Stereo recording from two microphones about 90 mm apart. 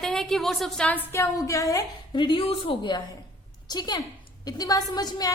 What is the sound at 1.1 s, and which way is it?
Speech, 35° left (ahead or behind).